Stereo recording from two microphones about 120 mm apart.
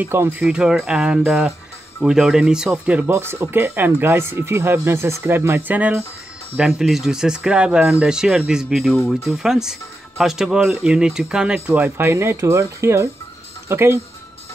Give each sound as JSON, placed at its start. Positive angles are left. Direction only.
{"t": 0.0, "sound": "speech", "side_deg": -15}